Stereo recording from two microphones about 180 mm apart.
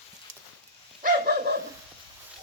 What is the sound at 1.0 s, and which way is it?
Dog, 60° right (ahead or behind).